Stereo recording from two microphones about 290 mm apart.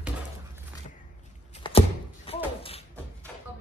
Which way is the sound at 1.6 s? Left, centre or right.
Centre.